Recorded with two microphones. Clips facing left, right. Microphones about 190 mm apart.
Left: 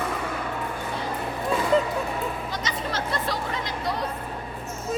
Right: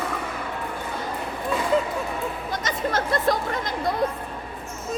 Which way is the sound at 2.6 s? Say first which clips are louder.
Right 6 dB; 50° right (ahead or behind).